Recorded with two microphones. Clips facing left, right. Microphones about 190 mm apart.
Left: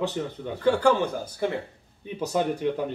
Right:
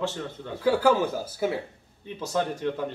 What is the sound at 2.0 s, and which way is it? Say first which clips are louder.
Speech: left 2 dB; 15° left (ahead or behind).